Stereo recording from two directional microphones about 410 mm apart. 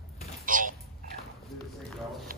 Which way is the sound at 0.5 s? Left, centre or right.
Centre.